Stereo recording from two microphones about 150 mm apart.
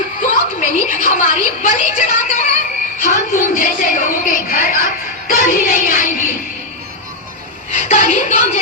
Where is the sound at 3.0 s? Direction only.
60° left (ahead or behind).